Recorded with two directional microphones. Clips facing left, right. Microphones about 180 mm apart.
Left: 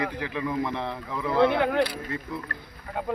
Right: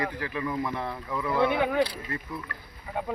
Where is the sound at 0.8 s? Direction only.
5° right (ahead or behind).